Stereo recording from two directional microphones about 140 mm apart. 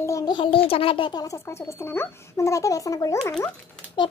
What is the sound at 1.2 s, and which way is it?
A child's voice, 20° left (ahead or behind).